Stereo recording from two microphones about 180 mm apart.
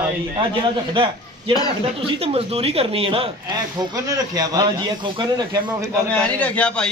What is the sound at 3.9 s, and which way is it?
Speech, 20° right (ahead or behind).